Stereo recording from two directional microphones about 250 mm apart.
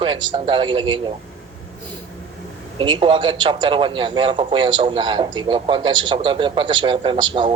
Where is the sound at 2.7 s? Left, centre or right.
Centre.